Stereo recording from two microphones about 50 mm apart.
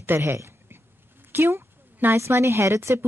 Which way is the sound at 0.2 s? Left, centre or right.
Right.